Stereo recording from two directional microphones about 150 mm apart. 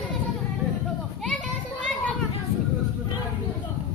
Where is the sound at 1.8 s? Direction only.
5° left (ahead or behind).